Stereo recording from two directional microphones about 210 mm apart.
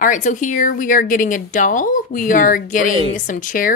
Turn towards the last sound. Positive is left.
turn(degrees=40)  # may be behind; listen again after turning